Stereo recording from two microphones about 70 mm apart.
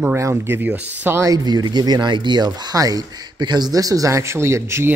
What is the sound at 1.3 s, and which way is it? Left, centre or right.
Speech, right.